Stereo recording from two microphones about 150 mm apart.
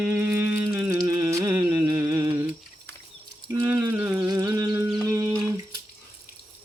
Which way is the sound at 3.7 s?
10° right (ahead or behind).